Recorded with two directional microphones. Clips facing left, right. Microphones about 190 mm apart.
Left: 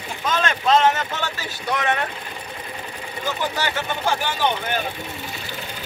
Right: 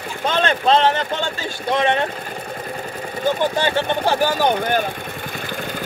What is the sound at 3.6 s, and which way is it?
Speech, 35° right (ahead or behind).